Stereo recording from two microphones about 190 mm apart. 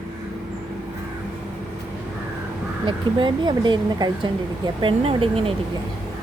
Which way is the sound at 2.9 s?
25° right (ahead or behind).